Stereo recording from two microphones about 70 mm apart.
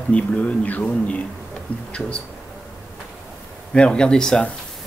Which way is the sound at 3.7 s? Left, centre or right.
Centre.